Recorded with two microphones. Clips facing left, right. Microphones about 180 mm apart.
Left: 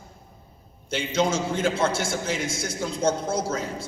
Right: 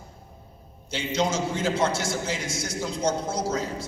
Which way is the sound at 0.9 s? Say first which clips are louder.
Left 2 dB; 55° left (ahead or behind).